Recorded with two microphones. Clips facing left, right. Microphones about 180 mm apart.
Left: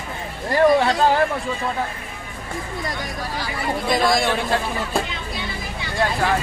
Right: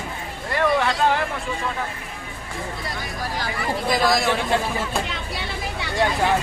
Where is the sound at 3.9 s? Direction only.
Centre (ahead or behind).